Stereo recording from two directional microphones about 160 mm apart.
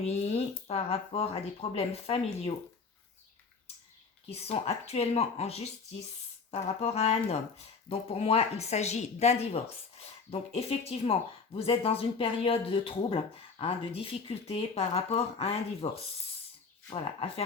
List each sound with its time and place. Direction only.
0.0 s speech: 40° left (ahead or behind)
4.3 s speech: 40° left (ahead or behind)